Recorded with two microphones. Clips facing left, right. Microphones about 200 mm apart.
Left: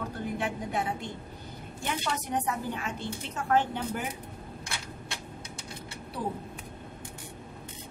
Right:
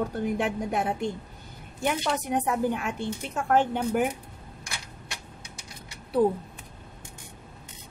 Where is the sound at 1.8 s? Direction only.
55° right (ahead or behind).